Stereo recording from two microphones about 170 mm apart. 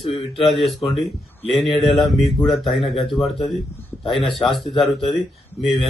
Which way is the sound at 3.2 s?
20° left (ahead or behind).